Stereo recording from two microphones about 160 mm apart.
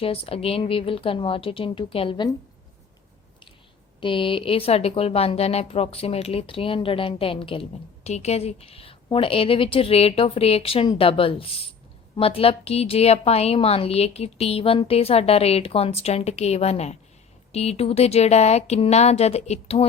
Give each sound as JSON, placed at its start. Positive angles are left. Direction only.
{"t": 0.0, "sound": "speech", "side_deg": 35}
{"t": 4.0, "sound": "speech", "side_deg": 30}